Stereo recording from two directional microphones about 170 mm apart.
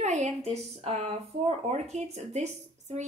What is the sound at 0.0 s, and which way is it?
Speech, 45° right (ahead or behind).